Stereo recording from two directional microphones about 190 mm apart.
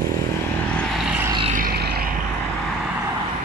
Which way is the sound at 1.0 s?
10° right (ahead or behind).